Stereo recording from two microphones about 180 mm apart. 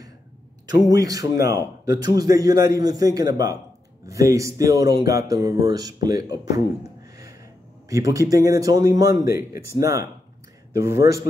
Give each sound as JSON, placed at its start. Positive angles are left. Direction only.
{"t": 0.8, "sound": "a man's voice", "side_deg": -20}
{"t": 7.9, "sound": "a man's voice", "side_deg": -20}